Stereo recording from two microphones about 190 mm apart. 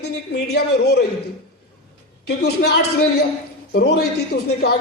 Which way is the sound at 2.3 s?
60° left (ahead or behind).